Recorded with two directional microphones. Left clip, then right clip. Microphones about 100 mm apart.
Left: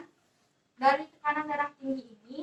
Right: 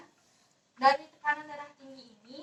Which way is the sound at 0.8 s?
25° left (ahead or behind).